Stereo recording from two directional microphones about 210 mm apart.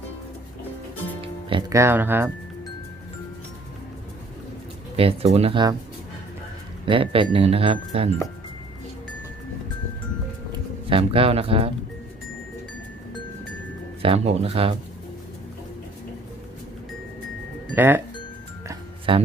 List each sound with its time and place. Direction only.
1.2 s music: 25° right (ahead or behind)
1.7 s speech: 10° right (ahead or behind)
4.9 s speech: 30° right (ahead or behind)
6.8 s speech: 25° right (ahead or behind)
10.5 s speech: 25° right (ahead or behind)
14.0 s speech: 30° right (ahead or behind)
17.7 s speech: 10° right (ahead or behind)
18.7 s music: 25° right (ahead or behind)